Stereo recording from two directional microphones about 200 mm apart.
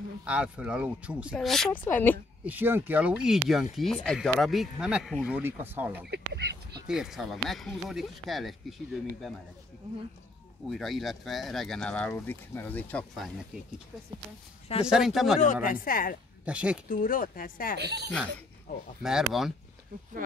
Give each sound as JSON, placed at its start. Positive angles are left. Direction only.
{"t": 0.2, "sound": "speech", "side_deg": -5}
{"t": 2.4, "sound": "speech", "side_deg": -10}
{"t": 6.0, "sound": "speech", "side_deg": -55}
{"t": 6.9, "sound": "speech", "side_deg": 0}
{"t": 10.7, "sound": "speech", "side_deg": 0}
{"t": 14.9, "sound": "speech", "side_deg": 0}
{"t": 15.4, "sound": "speech", "side_deg": 45}
{"t": 16.4, "sound": "speech", "side_deg": -5}
{"t": 16.9, "sound": "speech", "side_deg": 45}
{"t": 17.7, "sound": "speech", "side_deg": -55}
{"t": 19.0, "sound": "speech", "side_deg": 0}